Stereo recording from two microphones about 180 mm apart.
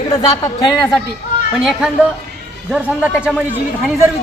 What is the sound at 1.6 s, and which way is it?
Speech, 5° right (ahead or behind).